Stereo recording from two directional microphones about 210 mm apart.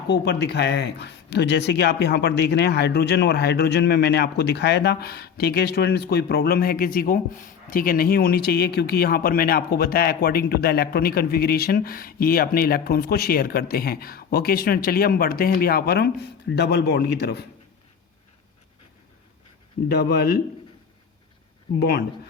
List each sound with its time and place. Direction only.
0.1 s speech: 50° left (ahead or behind)
19.9 s speech: 50° left (ahead or behind)
21.8 s speech: 50° left (ahead or behind)